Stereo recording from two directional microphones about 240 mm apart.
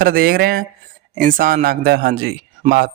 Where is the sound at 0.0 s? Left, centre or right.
Right.